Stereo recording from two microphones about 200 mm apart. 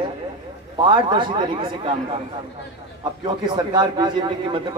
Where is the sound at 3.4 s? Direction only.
20° right (ahead or behind).